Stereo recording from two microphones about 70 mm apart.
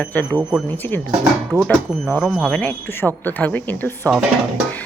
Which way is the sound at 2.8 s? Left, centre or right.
Left.